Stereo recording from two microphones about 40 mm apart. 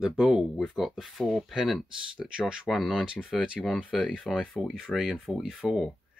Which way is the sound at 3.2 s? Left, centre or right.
Left.